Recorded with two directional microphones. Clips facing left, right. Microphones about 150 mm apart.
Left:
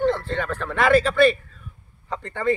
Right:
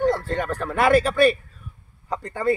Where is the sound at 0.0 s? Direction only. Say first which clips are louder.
Even; 10° right (ahead or behind).